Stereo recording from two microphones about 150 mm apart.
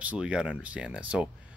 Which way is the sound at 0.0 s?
5° right (ahead or behind).